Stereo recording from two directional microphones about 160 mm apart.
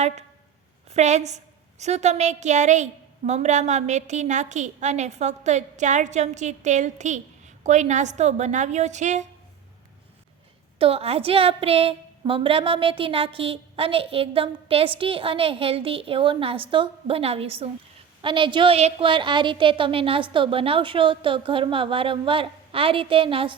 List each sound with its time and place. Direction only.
0.9 s a woman's voice: 45° right (ahead or behind)
10.8 s a woman's voice: 35° right (ahead or behind)